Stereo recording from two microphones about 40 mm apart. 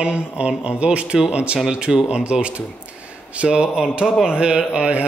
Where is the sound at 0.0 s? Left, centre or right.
Right.